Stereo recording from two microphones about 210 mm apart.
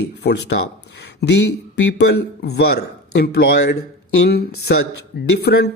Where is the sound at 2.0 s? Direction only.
50° left (ahead or behind).